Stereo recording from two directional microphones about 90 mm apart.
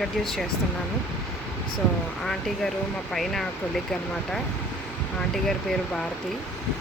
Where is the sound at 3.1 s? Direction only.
5° left (ahead or behind).